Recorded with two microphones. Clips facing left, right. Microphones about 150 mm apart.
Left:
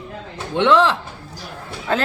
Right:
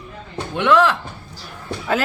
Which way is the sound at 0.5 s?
25° left (ahead or behind).